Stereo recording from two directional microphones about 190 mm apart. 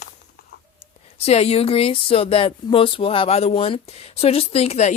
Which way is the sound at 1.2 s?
35° left (ahead or behind).